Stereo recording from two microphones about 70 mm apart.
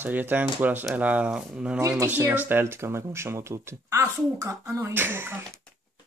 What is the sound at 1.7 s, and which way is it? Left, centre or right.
Speech, right.